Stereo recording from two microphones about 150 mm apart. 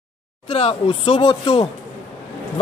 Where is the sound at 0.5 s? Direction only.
40° left (ahead or behind).